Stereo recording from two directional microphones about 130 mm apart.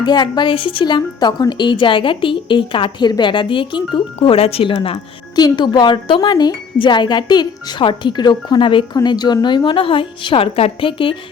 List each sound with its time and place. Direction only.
0.0 s speech: 35° left (ahead or behind)